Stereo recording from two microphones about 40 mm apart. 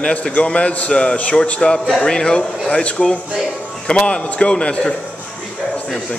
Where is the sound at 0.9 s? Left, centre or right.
Left.